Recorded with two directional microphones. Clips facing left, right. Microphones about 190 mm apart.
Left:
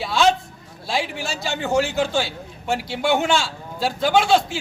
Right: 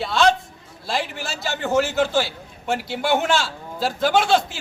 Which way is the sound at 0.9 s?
Centre (ahead or behind).